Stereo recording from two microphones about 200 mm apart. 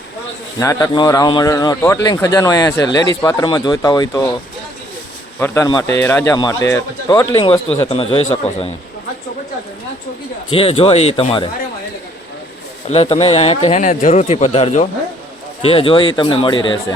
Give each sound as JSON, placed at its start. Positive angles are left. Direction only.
{"t": 0.6, "sound": "speech", "side_deg": 15}
{"t": 5.4, "sound": "speech", "side_deg": 15}
{"t": 7.8, "sound": "a man's voice", "side_deg": 25}
{"t": 10.5, "sound": "speech", "side_deg": 25}
{"t": 12.9, "sound": "a man's voice", "side_deg": 30}